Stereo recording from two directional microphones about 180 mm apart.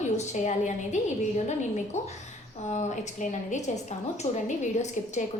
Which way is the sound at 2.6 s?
40° left (ahead or behind).